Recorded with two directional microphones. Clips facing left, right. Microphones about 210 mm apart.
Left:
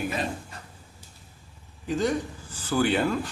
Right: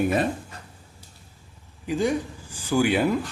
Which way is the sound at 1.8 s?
10° right (ahead or behind).